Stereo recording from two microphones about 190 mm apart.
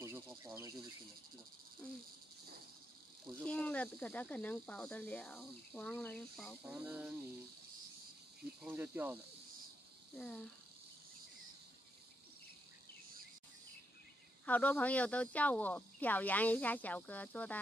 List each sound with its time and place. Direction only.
0.4 s insect: 15° right (ahead or behind)
3.3 s speech: 5° left (ahead or behind)
8.6 s speech: 10° right (ahead or behind)
10.1 s speech: 5° left (ahead or behind)
14.4 s speech: 10° left (ahead or behind)